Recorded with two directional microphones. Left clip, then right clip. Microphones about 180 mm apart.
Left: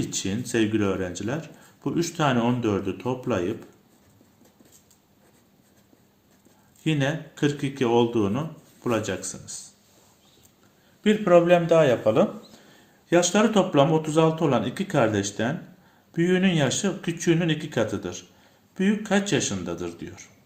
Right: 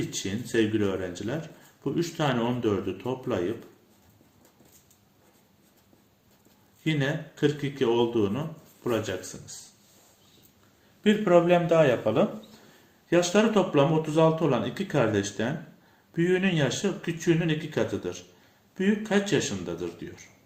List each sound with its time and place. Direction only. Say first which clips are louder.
0.1 s speech: left 2 dB; 35° left (ahead or behind)
6.8 s speech: left 3 dB; 30° left (ahead or behind)
11.0 s a man's voice: left 3 dB; 10° left (ahead or behind)
13.1 s speech: left 2 dB; 30° left (ahead or behind)